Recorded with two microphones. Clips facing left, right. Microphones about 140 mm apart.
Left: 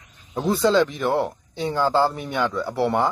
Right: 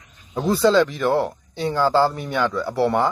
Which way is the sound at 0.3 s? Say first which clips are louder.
Right 2 dB; 20° left (ahead or behind).